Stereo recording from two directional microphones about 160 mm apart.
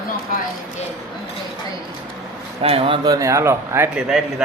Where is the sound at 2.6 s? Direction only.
35° right (ahead or behind); by 4.0 s 15° right (ahead or behind).